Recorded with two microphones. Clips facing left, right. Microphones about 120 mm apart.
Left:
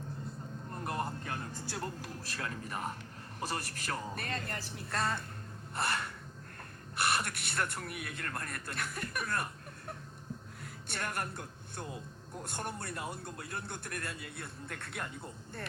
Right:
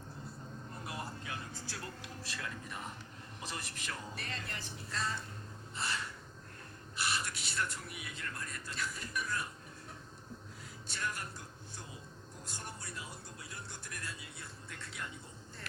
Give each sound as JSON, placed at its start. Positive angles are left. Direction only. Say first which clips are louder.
{"t": 0.7, "sound": "vehicle", "louder": "left 8 dB", "side_deg": 50}
{"t": 3.4, "sound": "speech", "louder": "left 6 dB", "side_deg": 50}
{"t": 5.7, "sound": "gasp", "louder": "left 5 dB", "side_deg": 60}
{"t": 6.9, "sound": "a man's voice", "louder": "left 5 dB", "side_deg": 60}